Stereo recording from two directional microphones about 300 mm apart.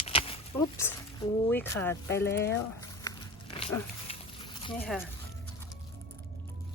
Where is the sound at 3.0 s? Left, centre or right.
Centre.